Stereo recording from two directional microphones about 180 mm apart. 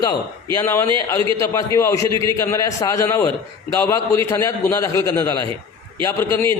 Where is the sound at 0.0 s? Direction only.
20° left (ahead or behind).